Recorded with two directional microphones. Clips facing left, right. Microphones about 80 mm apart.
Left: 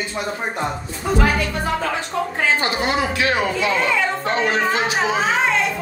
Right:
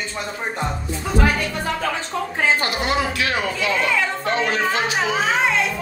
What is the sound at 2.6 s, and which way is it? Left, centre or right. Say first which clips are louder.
Speech: left 1 dB; left.